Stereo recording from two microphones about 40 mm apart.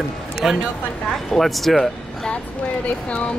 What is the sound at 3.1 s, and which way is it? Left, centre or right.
Speech, left.